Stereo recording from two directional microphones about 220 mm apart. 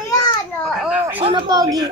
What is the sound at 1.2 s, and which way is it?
Babbling, 20° right (ahead or behind).